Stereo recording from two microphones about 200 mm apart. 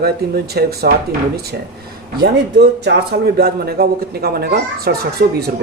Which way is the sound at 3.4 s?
50° right (ahead or behind).